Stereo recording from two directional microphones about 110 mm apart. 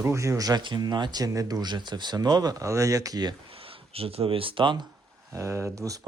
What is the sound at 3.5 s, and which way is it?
Speech, 60° right (ahead or behind).